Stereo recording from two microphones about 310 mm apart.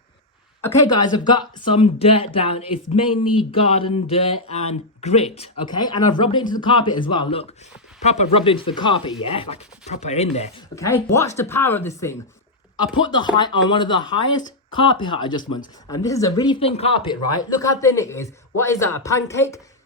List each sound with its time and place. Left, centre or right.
0.6 s speech: centre
10.8 s speech: centre